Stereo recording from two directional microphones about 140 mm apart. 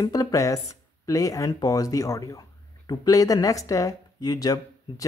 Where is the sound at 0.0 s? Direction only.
25° left (ahead or behind).